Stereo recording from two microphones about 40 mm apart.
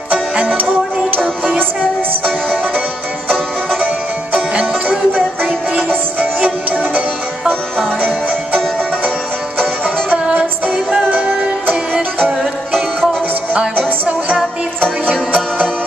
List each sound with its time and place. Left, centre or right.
2.2 s music: centre
3.8 s music: right
7.8 s music: centre
9.6 s music: centre
10.1 s music: right
12.4 s music: centre